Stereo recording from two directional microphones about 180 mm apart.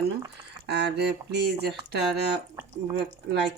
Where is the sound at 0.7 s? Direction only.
70° right (ahead or behind).